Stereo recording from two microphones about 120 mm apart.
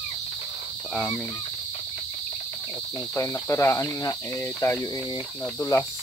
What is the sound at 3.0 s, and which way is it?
Speech, 20° left (ahead or behind).